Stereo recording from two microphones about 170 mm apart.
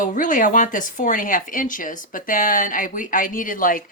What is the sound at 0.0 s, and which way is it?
Speech, 50° left (ahead or behind).